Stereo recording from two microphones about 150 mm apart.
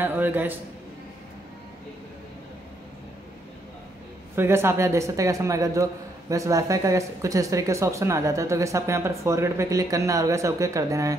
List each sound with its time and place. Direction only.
0.0 s a man's voice: 15° right (ahead or behind)
4.4 s a man's voice: 15° right (ahead or behind)